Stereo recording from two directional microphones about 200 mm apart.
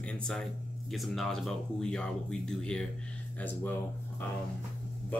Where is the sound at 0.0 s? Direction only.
5° left (ahead or behind).